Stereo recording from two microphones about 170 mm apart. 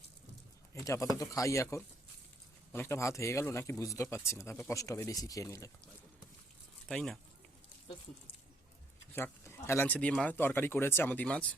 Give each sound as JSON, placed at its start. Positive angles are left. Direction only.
{"t": 0.7, "sound": "speech", "side_deg": 15}
{"t": 6.8, "sound": "speech", "side_deg": 5}
{"t": 9.1, "sound": "speech", "side_deg": 15}